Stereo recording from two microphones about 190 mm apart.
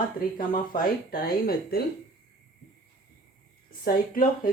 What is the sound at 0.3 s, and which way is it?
Speech, 45° left (ahead or behind).